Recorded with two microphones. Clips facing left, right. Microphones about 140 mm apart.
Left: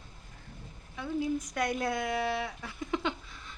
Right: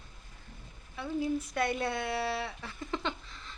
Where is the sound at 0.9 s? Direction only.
5° right (ahead or behind).